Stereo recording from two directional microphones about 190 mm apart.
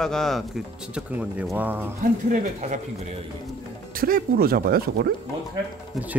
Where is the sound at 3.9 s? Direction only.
50° right (ahead or behind).